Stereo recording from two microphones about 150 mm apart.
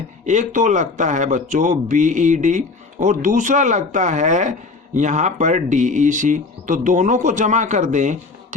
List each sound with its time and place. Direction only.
0.3 s speech: 55° right (ahead or behind)